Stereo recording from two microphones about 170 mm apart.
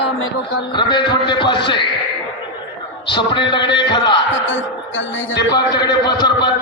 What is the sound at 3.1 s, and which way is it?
A man's voice, 30° left (ahead or behind).